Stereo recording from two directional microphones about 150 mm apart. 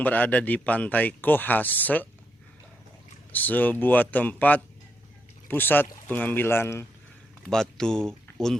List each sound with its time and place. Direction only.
0.0 s speech: 10° left (ahead or behind)
3.3 s speech: 10° left (ahead or behind)
7.4 s speech: 5° left (ahead or behind)